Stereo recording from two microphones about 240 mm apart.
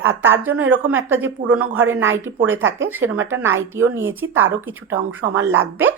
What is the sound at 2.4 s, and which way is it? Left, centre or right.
Speech, right.